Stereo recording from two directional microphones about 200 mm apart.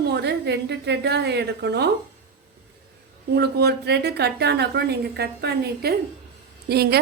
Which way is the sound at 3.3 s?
55° right (ahead or behind).